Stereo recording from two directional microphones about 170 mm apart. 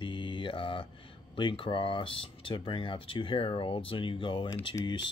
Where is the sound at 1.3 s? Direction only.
30° left (ahead or behind).